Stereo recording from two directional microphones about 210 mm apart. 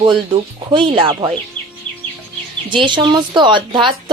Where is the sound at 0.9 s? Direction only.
25° right (ahead or behind).